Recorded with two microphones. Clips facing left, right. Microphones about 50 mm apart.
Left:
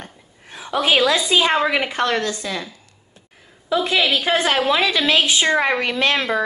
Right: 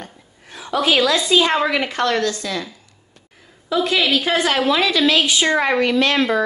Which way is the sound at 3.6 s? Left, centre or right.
Centre.